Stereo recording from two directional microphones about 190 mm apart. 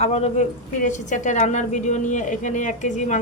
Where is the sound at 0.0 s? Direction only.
35° left (ahead or behind).